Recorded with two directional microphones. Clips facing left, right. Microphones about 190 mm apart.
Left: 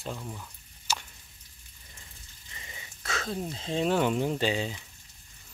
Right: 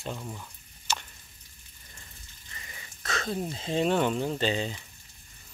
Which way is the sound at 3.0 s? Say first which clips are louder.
Right 2 dB; 5° left (ahead or behind).